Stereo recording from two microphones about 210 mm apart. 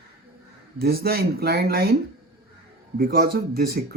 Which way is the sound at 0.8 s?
45° right (ahead or behind).